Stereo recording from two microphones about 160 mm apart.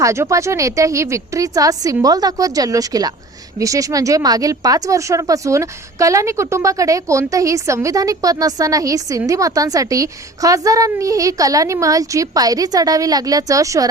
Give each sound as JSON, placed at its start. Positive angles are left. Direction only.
{"t": 0.0, "sound": "speech", "side_deg": -20}